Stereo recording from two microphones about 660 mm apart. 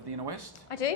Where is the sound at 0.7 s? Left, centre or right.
Left.